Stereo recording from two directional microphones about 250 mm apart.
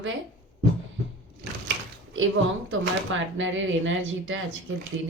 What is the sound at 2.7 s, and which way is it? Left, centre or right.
A woman's voice, right.